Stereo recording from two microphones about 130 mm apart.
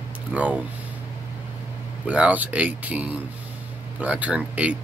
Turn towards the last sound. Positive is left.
turn(degrees=-10)  # may be behind; listen again after turning